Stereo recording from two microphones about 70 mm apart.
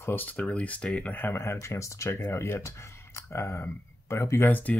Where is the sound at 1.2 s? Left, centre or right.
Left.